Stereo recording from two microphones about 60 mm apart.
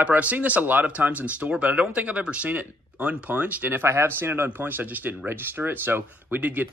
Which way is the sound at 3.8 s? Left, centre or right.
Right.